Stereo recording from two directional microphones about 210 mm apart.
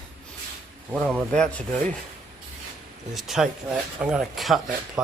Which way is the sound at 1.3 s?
5° left (ahead or behind).